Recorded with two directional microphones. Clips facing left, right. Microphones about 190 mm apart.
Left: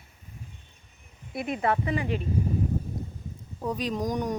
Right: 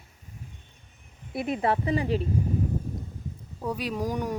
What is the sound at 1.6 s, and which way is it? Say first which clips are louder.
Speech: right 1 dB; 30° right (ahead or behind).